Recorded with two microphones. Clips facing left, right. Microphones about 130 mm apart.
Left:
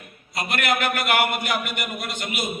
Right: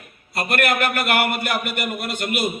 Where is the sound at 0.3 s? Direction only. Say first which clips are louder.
Right 3 dB; 55° right (ahead or behind).